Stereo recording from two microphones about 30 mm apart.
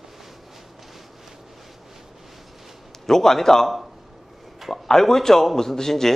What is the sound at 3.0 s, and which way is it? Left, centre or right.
Speech, centre.